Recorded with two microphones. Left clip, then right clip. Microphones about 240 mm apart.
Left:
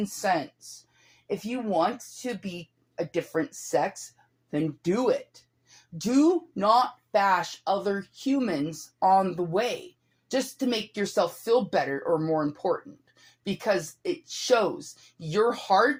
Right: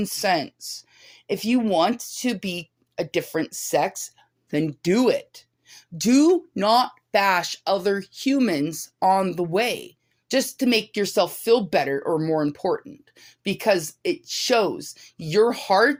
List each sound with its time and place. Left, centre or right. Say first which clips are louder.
0.0 s speech: right 4 dB; right
1.5 s speech: right 6 dB; right